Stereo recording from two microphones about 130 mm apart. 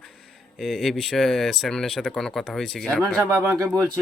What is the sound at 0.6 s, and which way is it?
Speech, centre (ahead or behind).